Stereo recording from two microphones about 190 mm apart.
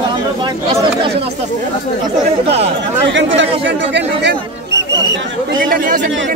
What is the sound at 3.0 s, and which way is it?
Speech, 75° right (ahead or behind).